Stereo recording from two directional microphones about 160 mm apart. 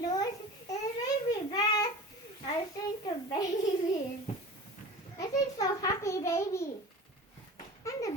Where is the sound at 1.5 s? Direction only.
25° left (ahead or behind).